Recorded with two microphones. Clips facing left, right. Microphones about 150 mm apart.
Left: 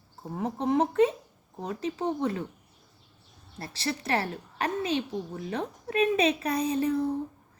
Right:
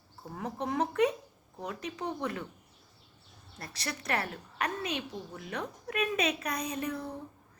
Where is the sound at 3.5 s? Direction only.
30° left (ahead or behind).